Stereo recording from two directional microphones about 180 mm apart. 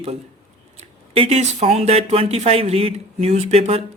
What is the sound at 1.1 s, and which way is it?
Speech, 35° right (ahead or behind).